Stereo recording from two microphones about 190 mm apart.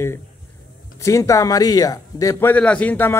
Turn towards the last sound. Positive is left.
turn(degrees=10)  # may be behind; listen again after turning